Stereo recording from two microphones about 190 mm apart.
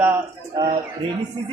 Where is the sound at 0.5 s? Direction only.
25° right (ahead or behind).